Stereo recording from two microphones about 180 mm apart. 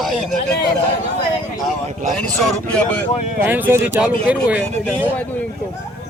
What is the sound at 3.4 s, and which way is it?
Speech, 10° right (ahead or behind).